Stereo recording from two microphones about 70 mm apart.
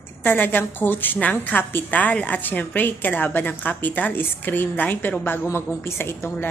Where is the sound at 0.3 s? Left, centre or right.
Left.